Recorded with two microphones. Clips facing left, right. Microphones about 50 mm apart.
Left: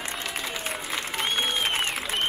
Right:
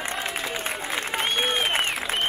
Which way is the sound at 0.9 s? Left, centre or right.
Centre.